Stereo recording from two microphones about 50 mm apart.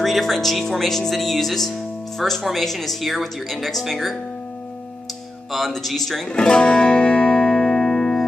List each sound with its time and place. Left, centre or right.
0.0 s speech: centre
5.5 s speech: centre
6.3 s music: centre